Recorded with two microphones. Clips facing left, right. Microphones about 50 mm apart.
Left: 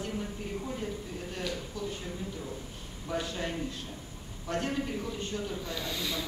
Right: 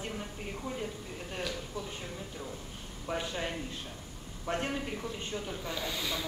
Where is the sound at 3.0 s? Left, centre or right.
Right.